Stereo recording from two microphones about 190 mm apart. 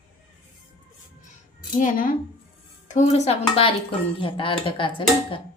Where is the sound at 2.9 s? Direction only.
35° left (ahead or behind).